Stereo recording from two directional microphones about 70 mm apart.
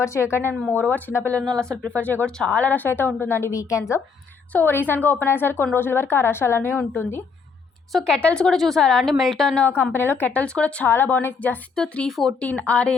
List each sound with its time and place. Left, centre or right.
0.0 s a woman's voice: left
0.7 s speech: left
1.5 s speech: right
1.9 s a woman's voice: left
3.5 s a woman's voice: left
4.5 s a woman's voice: left
7.9 s a woman's voice: centre
9.6 s speech: left
10.4 s a woman's voice: centre
10.8 s speech: left
11.7 s a woman's voice: centre
12.4 s speech: left